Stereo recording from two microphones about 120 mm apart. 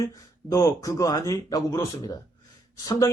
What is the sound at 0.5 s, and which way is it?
Speech, 30° left (ahead or behind).